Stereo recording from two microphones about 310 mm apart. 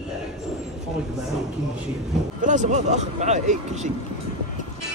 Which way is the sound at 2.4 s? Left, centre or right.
Right.